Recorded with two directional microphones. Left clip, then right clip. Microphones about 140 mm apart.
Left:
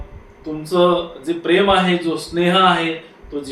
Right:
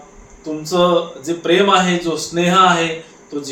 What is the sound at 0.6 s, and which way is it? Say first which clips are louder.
Speech: right 1 dB; 10° right (ahead or behind).